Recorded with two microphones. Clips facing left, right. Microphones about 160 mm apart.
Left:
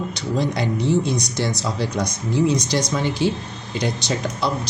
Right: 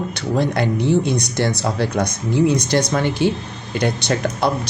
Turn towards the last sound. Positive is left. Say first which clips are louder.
# right 4 dB
turn(degrees=-60)  # may be behind; listen again after turning